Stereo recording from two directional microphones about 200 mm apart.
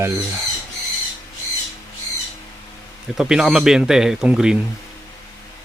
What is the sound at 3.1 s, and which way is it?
Speech, 5° right (ahead or behind).